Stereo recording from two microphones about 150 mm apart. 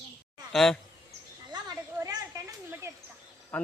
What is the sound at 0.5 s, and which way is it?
Speech, 5° left (ahead or behind).